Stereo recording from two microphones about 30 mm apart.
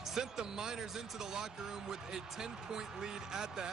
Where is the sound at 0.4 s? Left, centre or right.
Centre.